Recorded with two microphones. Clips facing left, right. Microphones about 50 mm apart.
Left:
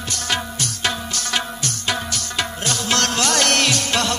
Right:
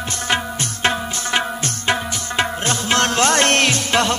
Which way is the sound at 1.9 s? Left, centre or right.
Right.